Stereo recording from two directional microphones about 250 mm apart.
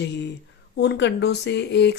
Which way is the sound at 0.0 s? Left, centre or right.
Left.